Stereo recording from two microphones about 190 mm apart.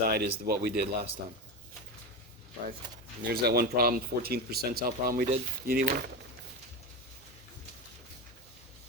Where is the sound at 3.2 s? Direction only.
55° right (ahead or behind).